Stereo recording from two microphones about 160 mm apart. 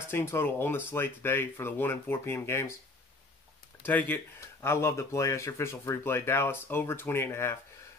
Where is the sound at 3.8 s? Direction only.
10° left (ahead or behind).